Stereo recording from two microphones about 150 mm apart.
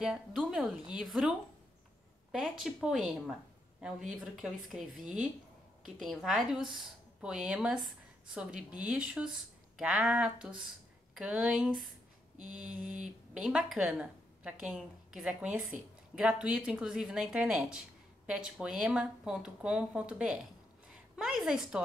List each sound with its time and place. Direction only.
0.0 s speech: 5° right (ahead or behind)
2.3 s speech: 5° right (ahead or behind)
5.0 s speech: 60° right (ahead or behind)
5.9 s speech: centre (ahead or behind)
13.0 s a woman's voice: 5° right (ahead or behind)